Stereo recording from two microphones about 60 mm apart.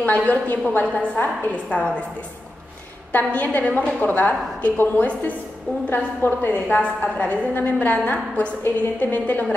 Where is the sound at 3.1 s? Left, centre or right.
Left.